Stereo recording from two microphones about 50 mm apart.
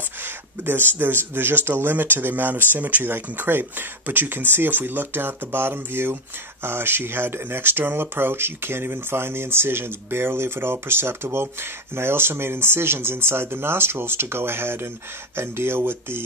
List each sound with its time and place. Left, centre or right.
0.2 s speech: right